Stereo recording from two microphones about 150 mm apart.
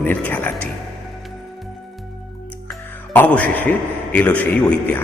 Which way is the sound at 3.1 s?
10° left (ahead or behind).